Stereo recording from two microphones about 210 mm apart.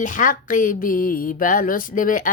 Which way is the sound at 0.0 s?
40° left (ahead or behind).